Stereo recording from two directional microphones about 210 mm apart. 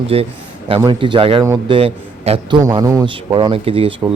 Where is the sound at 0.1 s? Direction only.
25° right (ahead or behind).